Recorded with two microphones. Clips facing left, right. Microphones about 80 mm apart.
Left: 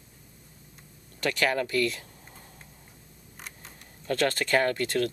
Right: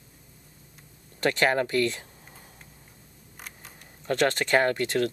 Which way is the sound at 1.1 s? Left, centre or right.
Right.